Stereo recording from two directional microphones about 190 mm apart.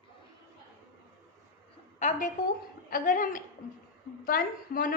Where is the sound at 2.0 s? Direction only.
40° left (ahead or behind).